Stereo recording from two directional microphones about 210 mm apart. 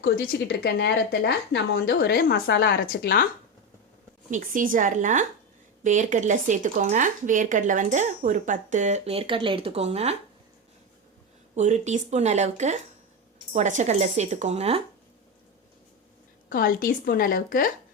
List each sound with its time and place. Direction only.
0.2 s speech: 50° left (ahead or behind)
4.3 s speech: 40° right (ahead or behind)
11.5 s speech: 35° right (ahead or behind)
16.5 s a woman's voice: 40° left (ahead or behind)